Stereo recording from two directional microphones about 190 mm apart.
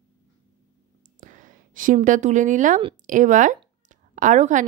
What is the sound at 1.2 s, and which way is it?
A woman's voice, 40° right (ahead or behind).